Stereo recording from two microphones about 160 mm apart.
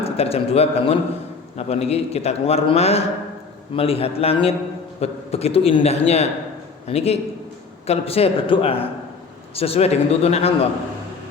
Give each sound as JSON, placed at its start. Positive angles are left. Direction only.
{"t": 0.0, "sound": "a man's voice", "side_deg": 40}